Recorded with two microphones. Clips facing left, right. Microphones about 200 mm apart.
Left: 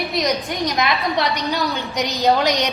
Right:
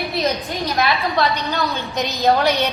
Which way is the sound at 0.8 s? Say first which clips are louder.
Right 3 dB; 15° left (ahead or behind).